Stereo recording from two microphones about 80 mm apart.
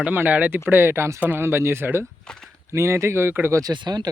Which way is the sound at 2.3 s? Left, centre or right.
Centre.